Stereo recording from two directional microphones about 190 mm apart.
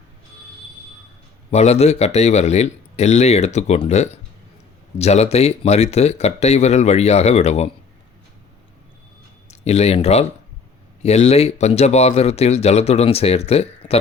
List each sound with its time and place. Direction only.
1.5 s speech: 35° left (ahead or behind)
9.5 s speech: 35° left (ahead or behind)